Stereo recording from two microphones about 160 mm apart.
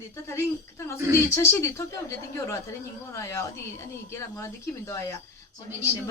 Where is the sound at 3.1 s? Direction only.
15° left (ahead or behind).